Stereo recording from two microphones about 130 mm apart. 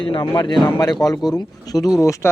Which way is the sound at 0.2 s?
30° left (ahead or behind).